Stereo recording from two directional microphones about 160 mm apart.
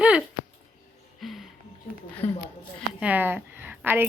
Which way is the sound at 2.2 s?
40° left (ahead or behind).